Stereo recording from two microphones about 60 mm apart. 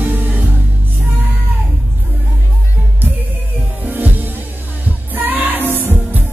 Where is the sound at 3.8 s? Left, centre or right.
Right.